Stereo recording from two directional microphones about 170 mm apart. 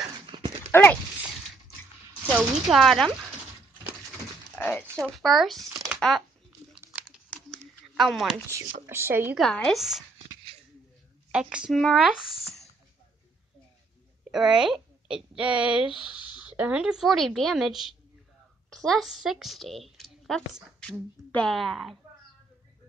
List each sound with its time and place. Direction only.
0.0 s dog: 25° right (ahead or behind)
0.7 s a sound: 15° left (ahead or behind)
2.3 s speech: centre (ahead or behind)
4.6 s speech: 10° left (ahead or behind)
5.0 s speech: centre (ahead or behind)
5.9 s a sound: centre (ahead or behind)
7.1 s crumpling: centre (ahead or behind)
8.8 s speech: 15° right (ahead or behind)
9.4 s speech: centre (ahead or behind)
10.2 s a sound: 25° right (ahead or behind)
11.3 s speech: 5° right (ahead or behind)
14.3 s a woman's voice: centre (ahead or behind)